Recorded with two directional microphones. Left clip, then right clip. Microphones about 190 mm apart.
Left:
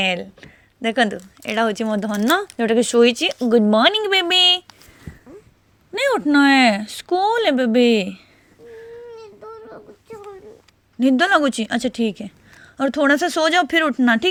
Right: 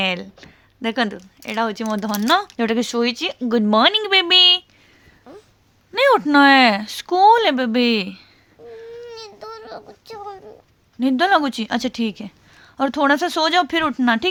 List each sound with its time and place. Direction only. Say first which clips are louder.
0.0 s speech: left 1 dB; centre (ahead or behind)
1.4 s speech: left 2 dB; 15° left (ahead or behind)
1.9 s a woman's voice: right 1 dB; 5° left (ahead or behind)
3.5 s a woman's voice: even; 5° right (ahead or behind)
5.9 s speech: right 3 dB; 10° right (ahead or behind)
9.1 s child singing: right 2 dB; 40° right (ahead or behind)
11.0 s a woman's voice: left 1 dB; 5° left (ahead or behind)